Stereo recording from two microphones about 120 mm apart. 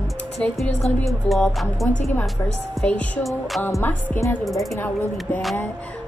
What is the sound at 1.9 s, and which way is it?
Speech, 90° left.